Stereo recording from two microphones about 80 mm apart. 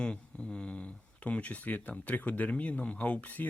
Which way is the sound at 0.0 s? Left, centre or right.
Centre.